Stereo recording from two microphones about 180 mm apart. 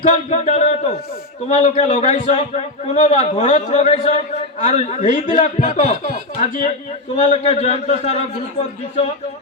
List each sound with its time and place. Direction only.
0.1 s a man's voice: 40° left (ahead or behind)